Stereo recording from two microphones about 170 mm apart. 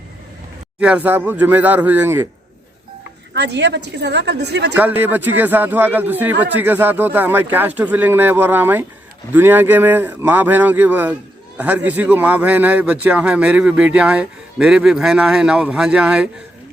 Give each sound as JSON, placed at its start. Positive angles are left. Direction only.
{"t": 0.8, "sound": "speech", "side_deg": -5}
{"t": 3.3, "sound": "a woman's voice", "side_deg": -90}
{"t": 4.8, "sound": "speech", "side_deg": -10}